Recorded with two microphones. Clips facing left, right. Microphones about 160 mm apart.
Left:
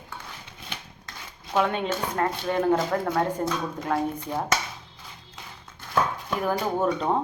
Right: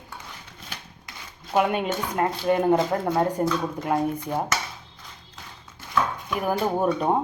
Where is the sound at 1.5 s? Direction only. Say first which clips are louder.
Right 2 dB; 10° right (ahead or behind).